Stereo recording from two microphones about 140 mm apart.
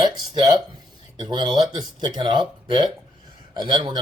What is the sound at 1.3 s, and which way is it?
A man's voice, 30° right (ahead or behind).